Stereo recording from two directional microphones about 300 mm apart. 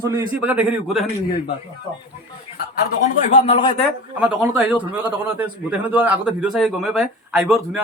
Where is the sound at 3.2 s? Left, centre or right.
Left.